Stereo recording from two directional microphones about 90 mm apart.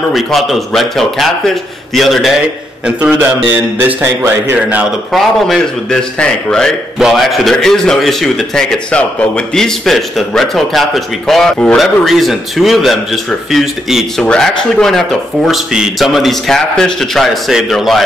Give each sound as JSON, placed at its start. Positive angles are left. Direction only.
{"t": 0.1, "sound": "a man's voice", "side_deg": 0}
{"t": 2.8, "sound": "a man's voice", "side_deg": -20}
{"t": 5.1, "sound": "a man's voice", "side_deg": 5}